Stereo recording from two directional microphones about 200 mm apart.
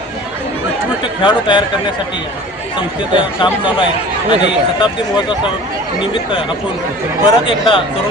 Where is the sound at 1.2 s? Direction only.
25° left (ahead or behind).